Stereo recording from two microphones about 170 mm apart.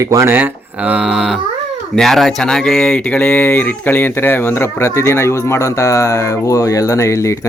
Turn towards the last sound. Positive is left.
turn(degrees=15)  # may be behind; listen again after turning